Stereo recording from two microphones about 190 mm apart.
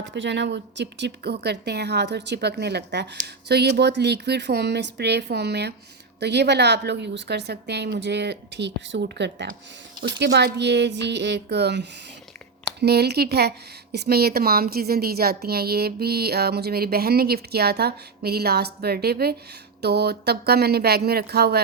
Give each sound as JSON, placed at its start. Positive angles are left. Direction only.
{"t": 0.0, "sound": "a woman's voice", "side_deg": -70}